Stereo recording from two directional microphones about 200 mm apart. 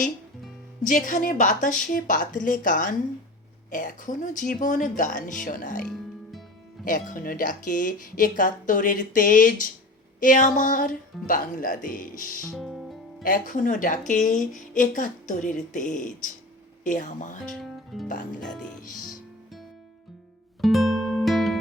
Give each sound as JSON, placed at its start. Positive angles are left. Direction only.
{"t": 0.9, "sound": "speech", "side_deg": 40}
{"t": 6.8, "sound": "speech", "side_deg": 40}
{"t": 12.5, "sound": "music", "side_deg": 0}
{"t": 13.2, "sound": "speech", "side_deg": 40}
{"t": 17.4, "sound": "speech", "side_deg": 0}
{"t": 18.1, "sound": "speech", "side_deg": 40}
{"t": 20.6, "sound": "music", "side_deg": 0}